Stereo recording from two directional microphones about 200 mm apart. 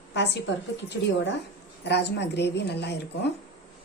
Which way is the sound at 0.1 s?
60° left (ahead or behind).